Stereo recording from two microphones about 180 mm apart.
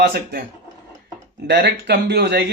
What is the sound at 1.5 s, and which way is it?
Speech, 65° right (ahead or behind).